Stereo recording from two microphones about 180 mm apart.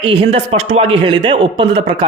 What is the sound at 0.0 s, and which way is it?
Speech, 30° right (ahead or behind).